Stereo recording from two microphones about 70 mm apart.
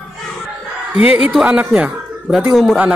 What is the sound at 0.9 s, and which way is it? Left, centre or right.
Speech, right.